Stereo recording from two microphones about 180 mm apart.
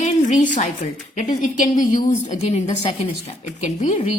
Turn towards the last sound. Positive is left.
turn(degrees=40)  # may be behind; listen again after turning